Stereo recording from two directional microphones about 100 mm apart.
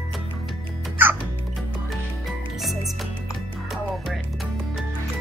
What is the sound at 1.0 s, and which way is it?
Music, 20° right (ahead or behind).